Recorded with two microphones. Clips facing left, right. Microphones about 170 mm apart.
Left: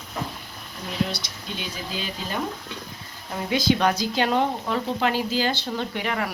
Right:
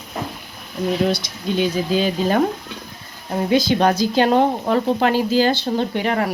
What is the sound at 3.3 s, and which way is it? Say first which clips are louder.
Speech: right 5 dB; 35° right (ahead or behind).